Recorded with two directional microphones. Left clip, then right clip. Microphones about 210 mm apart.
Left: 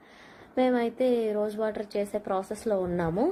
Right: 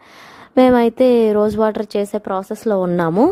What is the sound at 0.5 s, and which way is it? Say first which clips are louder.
A woman's voice: right 13 dB; 55° right (ahead or behind).